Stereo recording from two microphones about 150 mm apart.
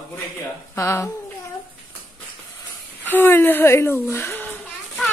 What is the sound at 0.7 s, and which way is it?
Speech, 20° left (ahead or behind).